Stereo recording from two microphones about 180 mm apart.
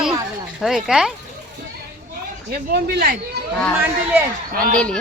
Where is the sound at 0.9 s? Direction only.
Centre (ahead or behind).